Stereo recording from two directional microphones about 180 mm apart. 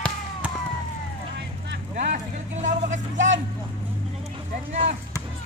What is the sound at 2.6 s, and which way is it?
Vehicle, 45° right (ahead or behind).